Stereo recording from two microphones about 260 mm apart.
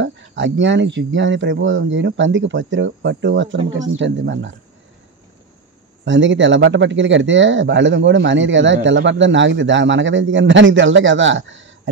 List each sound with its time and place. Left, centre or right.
0.0 s speech: right
6.0 s speech: right